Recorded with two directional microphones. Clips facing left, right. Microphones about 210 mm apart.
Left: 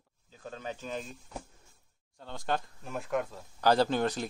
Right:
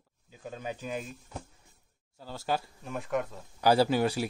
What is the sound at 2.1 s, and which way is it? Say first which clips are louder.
A man's voice: right 1 dB; 5° right (ahead or behind).